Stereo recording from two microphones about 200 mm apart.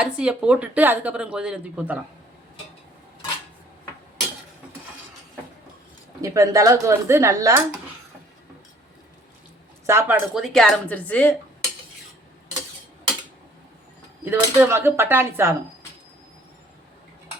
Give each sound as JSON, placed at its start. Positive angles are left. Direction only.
{"t": 0.0, "sound": "speech", "side_deg": -5}
{"t": 6.2, "sound": "speech", "side_deg": -15}
{"t": 9.8, "sound": "speech", "side_deg": -15}
{"t": 10.3, "sound": "speech", "side_deg": 0}
{"t": 14.3, "sound": "speech", "side_deg": -10}